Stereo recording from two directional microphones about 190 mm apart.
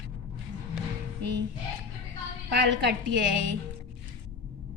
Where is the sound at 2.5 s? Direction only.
65° right (ahead or behind).